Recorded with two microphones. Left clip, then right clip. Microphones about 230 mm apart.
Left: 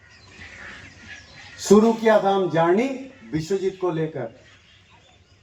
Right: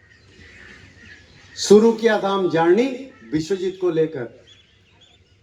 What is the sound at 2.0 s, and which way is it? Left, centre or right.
Speech, centre.